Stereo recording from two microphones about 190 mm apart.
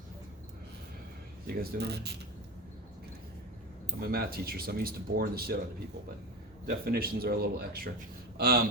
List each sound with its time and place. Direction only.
1.5 s speech: 55° right (ahead or behind)
4.0 s speech: 55° right (ahead or behind)
6.7 s speech: 55° right (ahead or behind)